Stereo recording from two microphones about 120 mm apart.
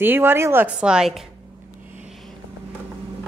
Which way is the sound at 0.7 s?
5° right (ahead or behind).